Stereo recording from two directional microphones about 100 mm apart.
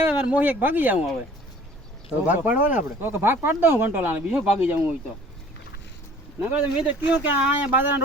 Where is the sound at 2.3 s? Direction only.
15° right (ahead or behind).